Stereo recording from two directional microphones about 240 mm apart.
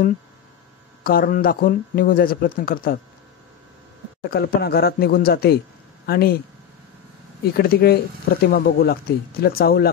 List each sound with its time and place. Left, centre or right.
1.0 s speech: left
4.3 s speech: left
7.5 s speech: left